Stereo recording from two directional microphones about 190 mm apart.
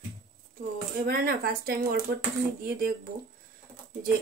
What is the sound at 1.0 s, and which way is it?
Speech, 55° right (ahead or behind).